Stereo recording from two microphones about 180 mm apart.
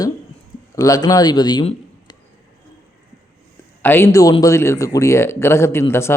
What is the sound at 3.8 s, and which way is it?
A man's voice, 10° left (ahead or behind).